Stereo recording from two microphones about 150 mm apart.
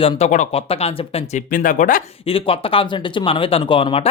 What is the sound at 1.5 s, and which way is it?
Speech, 65° left (ahead or behind).